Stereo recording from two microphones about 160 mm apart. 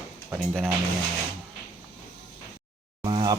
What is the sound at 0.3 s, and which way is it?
Speech, 10° right (ahead or behind).